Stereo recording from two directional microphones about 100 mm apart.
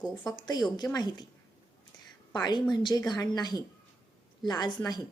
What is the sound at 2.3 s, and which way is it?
Speech, 45° left (ahead or behind).